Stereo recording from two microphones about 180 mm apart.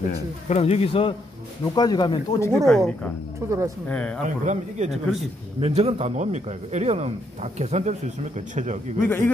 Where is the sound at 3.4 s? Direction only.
15° right (ahead or behind).